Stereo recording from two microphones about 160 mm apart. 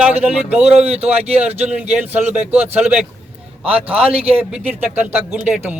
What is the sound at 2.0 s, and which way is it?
Speech, 10° right (ahead or behind).